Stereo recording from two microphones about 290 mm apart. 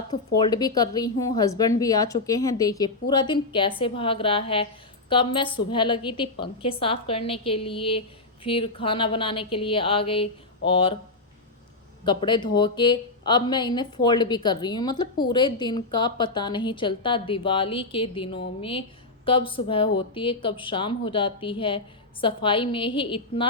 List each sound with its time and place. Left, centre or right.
0.4 s a woman's voice: centre
12.0 s speech: centre